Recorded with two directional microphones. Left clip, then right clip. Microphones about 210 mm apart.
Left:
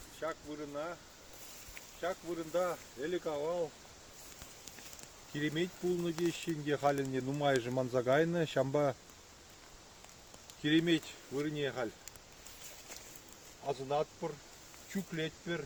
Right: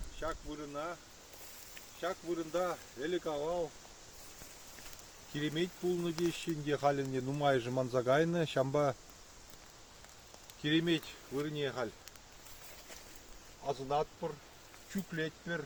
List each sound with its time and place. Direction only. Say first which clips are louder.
0.2 s speech: even; centre (ahead or behind)
2.0 s speech: right 1 dB; 10° right (ahead or behind)
5.3 s speech: even; centre (ahead or behind)
10.6 s speech: left 2 dB; 15° left (ahead or behind)
13.7 s speech: even; 25° left (ahead or behind)
15.1 s speech: right 1 dB; 40° left (ahead or behind)